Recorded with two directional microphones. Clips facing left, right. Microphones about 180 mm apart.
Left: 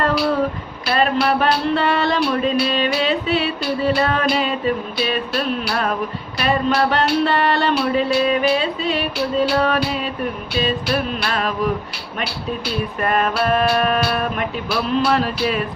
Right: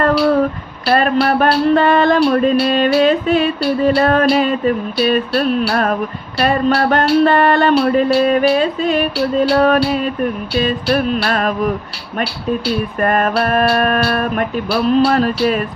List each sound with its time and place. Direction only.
0.9 s music: 50° right (ahead or behind)
13.0 s music: 50° right (ahead or behind)